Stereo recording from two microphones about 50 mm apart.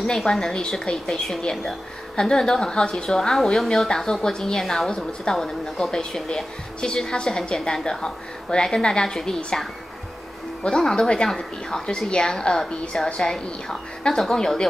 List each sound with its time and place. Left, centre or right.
0.0 s speech: centre